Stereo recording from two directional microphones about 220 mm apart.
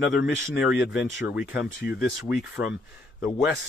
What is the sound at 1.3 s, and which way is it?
Speech, 5° right (ahead or behind).